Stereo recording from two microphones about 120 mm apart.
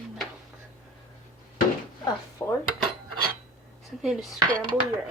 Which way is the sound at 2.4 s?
25° left (ahead or behind).